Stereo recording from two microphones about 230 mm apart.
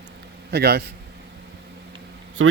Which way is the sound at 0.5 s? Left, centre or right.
Right.